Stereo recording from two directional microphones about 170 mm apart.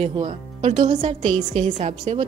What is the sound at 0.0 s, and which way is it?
Speech, 40° right (ahead or behind).